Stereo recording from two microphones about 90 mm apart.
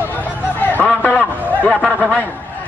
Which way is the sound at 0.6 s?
20° left (ahead or behind).